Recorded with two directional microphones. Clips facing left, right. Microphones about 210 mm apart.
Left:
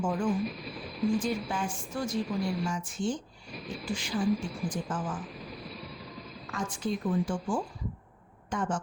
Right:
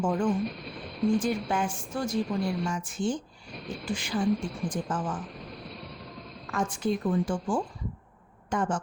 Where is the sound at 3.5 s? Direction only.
Centre (ahead or behind).